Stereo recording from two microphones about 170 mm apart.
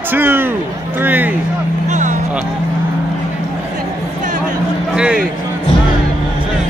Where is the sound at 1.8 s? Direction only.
45° right (ahead or behind).